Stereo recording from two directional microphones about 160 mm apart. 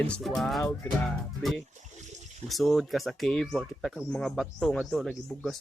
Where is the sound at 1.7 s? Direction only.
50° right (ahead or behind).